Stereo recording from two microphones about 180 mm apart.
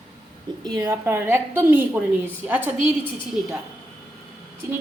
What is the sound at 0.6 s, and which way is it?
A woman's voice, 20° right (ahead or behind).